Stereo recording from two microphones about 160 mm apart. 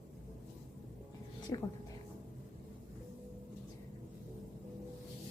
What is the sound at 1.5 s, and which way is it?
Speech, 25° left (ahead or behind).